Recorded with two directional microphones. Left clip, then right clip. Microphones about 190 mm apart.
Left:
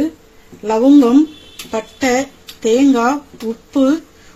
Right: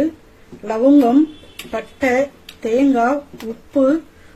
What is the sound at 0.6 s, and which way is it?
Speech, 55° left (ahead or behind).